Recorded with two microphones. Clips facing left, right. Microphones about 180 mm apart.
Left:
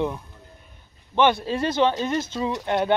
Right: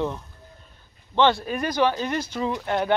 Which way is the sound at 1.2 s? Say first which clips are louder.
Left 1 dB; 20° left (ahead or behind).